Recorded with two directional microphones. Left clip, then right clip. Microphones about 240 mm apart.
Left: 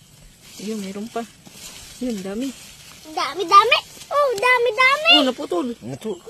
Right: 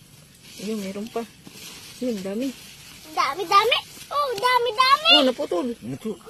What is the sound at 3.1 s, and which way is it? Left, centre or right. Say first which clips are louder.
A child's voice: left 4 dB; left.